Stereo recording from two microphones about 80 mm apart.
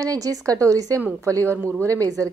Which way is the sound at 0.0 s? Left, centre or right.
Right.